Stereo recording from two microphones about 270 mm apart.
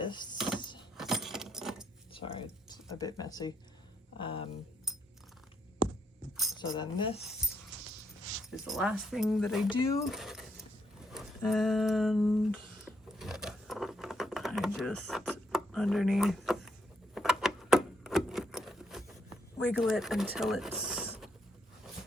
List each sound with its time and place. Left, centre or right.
0.0 s dishes: centre
0.6 s keys jangling: centre
0.9 s keys jangling: centre
2.1 s a sound: centre
4.2 s speech: centre
6.3 s keys jangling: centre
6.6 s speech: centre
8.4 s speech: centre
13.1 s a sound: centre
19.5 s speech: centre